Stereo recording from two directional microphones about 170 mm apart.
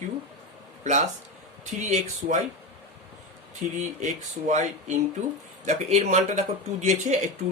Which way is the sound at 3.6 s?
45° right (ahead or behind).